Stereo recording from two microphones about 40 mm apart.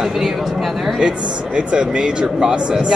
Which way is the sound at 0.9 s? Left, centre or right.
Right.